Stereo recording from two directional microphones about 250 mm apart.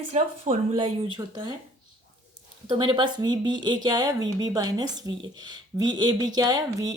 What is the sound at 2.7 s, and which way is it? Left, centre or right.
A woman's voice, centre.